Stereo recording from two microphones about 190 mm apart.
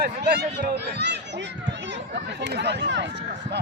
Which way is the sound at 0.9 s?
65° right (ahead or behind).